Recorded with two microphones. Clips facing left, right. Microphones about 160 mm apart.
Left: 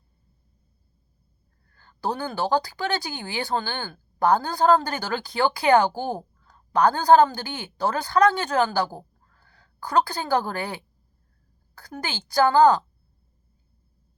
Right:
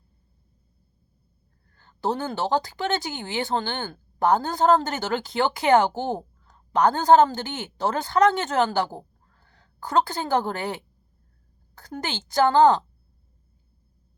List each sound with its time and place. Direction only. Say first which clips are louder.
1.7 s speech: right 2 dB; 20° right (ahead or behind)